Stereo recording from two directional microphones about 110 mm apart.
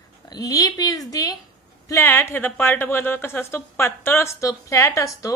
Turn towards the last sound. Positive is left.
turn(degrees=30)  # may be behind; listen again after turning